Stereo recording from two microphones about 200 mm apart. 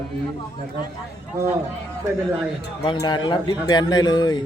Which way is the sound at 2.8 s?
20° left (ahead or behind).